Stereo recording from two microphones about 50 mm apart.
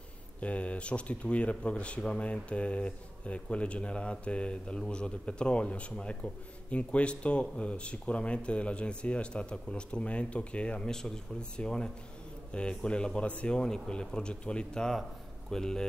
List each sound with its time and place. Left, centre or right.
0.4 s speech: left